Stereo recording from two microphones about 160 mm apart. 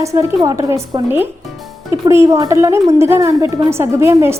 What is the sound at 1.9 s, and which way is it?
A woman's voice, 20° right (ahead or behind).